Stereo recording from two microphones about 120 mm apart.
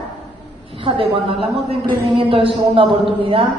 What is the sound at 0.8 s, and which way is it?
A man's voice, 50° right (ahead or behind).